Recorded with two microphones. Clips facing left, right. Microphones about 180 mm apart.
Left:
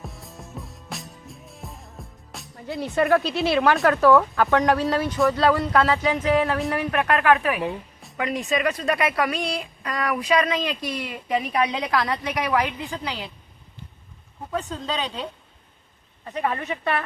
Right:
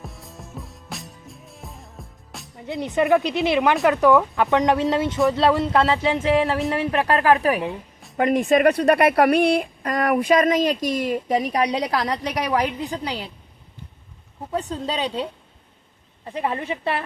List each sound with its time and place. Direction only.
0.0 s music: centre (ahead or behind)
2.6 s speech: 20° right (ahead or behind); by 7.6 s 35° right (ahead or behind)
8.1 s speech: 50° right (ahead or behind)
14.5 s speech: 35° right (ahead or behind)